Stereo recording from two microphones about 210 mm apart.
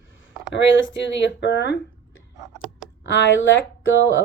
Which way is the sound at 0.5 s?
60° left (ahead or behind).